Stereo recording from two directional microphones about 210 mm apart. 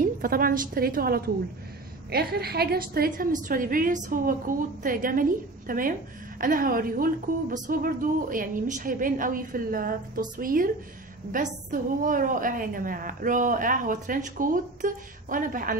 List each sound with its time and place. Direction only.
0.2 s a woman's voice: 45° right (ahead or behind)